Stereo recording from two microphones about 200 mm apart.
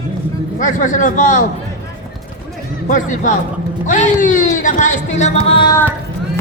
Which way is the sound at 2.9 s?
40° left (ahead or behind).